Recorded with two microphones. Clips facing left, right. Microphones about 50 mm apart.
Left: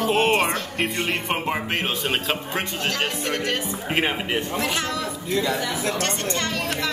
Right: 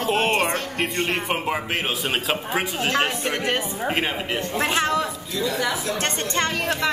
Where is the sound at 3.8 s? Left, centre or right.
Centre.